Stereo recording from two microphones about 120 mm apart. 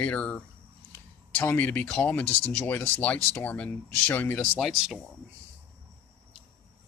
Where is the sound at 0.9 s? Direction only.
15° left (ahead or behind).